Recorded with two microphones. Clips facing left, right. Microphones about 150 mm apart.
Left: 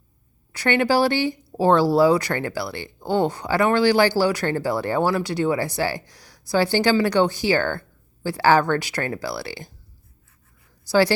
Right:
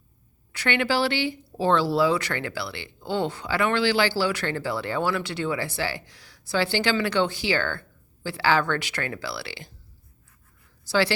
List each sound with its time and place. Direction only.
0.5 s speech: 40° left (ahead or behind)